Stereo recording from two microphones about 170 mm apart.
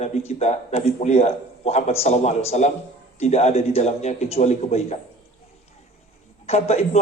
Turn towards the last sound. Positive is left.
turn(degrees=40)  # may be behind; listen again after turning